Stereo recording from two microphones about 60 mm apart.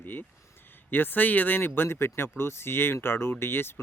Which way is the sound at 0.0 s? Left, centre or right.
Left.